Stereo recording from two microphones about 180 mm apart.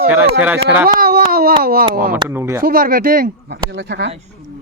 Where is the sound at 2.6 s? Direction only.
55° right (ahead or behind).